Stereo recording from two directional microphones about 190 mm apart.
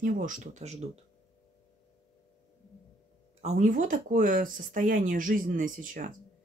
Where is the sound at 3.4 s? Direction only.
40° right (ahead or behind).